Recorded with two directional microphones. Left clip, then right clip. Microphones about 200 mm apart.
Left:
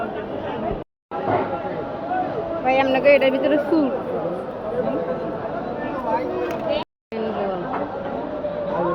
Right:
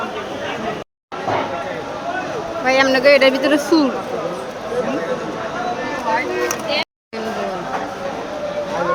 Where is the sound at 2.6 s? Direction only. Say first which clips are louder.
Right 4 dB; 30° right (ahead or behind).